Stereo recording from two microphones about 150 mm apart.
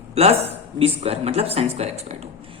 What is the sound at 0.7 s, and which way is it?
Speech, 40° right (ahead or behind).